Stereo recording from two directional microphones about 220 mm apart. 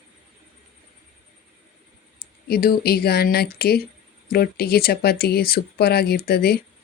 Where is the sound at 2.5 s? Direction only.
45° left (ahead or behind).